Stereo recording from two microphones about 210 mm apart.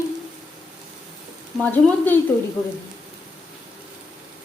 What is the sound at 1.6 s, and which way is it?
Speech, 10° left (ahead or behind).